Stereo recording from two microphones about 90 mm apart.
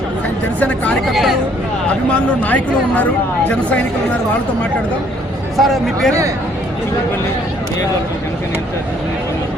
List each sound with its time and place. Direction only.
1.0 s speech: centre (ahead or behind)
2.4 s speech: 20° left (ahead or behind)
5.5 s speech: centre (ahead or behind)